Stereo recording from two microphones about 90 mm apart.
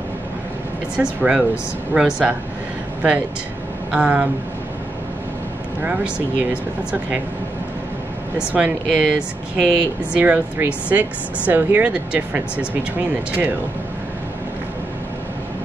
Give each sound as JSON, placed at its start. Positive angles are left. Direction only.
{"t": 0.9, "sound": "speech", "side_deg": -10}
{"t": 3.9, "sound": "speech", "side_deg": -15}
{"t": 5.8, "sound": "speech", "side_deg": -15}
{"t": 8.5, "sound": "speech", "side_deg": -10}